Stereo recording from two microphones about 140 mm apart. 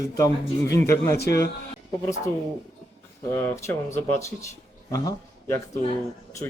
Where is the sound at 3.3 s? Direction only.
15° left (ahead or behind).